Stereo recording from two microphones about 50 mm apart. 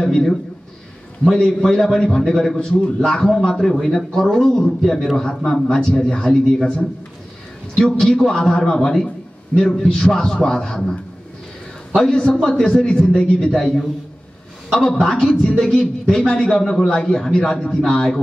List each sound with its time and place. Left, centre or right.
0.0 s a man's voice: centre
5.4 s speech: centre
5.8 s a man's voice: centre
12.0 s a man's voice: centre
16.5 s a man's voice: centre